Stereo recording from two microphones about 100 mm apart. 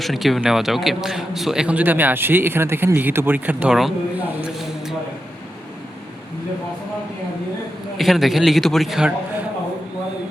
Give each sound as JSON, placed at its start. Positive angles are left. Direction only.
{"t": 0.0, "sound": "a man's voice", "side_deg": 0}
{"t": 3.7, "sound": "a man's voice", "side_deg": 0}
{"t": 4.4, "sound": "a sound", "side_deg": -10}
{"t": 7.9, "sound": "a man's voice", "side_deg": 0}